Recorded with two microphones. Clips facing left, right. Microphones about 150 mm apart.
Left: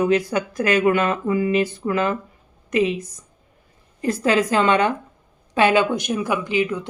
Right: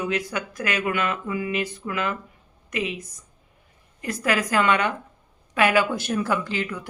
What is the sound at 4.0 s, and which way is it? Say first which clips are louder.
A woman's voice: left 6 dB; 30° left (ahead or behind).